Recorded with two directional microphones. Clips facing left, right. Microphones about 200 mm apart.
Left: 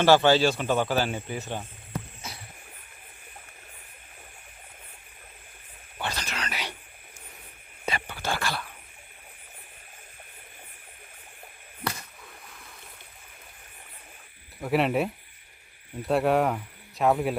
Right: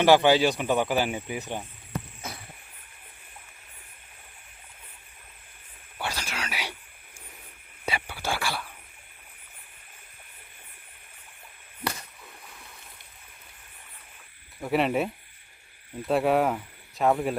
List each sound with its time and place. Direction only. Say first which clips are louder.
0.0 s speech: even; 15° right (ahead or behind)
2.2 s a sound: right 3 dB; 55° right (ahead or behind)
6.0 s whispering: even; 10° right (ahead or behind)
7.9 s whispering: even; 10° right (ahead or behind)
14.6 s speech: even; centre (ahead or behind)